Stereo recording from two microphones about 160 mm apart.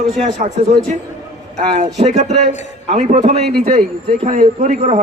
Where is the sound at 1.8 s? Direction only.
45° right (ahead or behind).